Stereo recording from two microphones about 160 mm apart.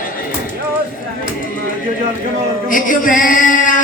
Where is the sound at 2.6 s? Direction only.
55° left (ahead or behind).